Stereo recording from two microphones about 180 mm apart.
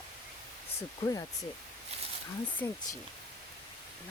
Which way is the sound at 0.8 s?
20° left (ahead or behind).